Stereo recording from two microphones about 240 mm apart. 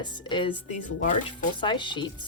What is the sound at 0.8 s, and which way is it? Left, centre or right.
Speech, left.